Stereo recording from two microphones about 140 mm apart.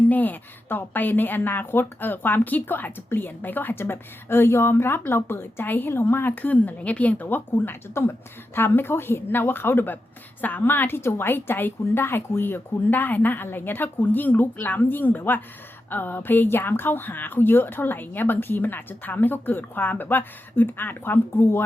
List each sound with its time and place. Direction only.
0.1 s a woman's voice: 10° left (ahead or behind)